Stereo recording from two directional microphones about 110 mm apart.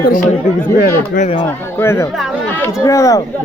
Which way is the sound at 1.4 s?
20° left (ahead or behind).